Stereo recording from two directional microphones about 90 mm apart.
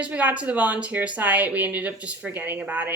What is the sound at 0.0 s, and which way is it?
Speech, 15° right (ahead or behind).